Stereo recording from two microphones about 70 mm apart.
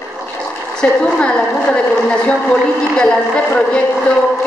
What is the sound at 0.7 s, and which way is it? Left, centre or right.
A woman's voice, centre.